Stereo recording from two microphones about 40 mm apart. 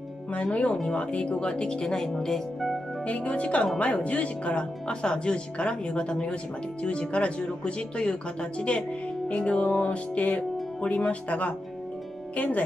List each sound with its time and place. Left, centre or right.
0.3 s music: left
0.9 s speech: left
2.0 s speech: centre
3.1 s music: left
3.8 s speech: left
9.7 s music: left